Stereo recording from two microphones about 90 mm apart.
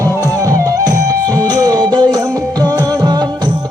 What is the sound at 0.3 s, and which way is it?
Music, 40° right (ahead or behind).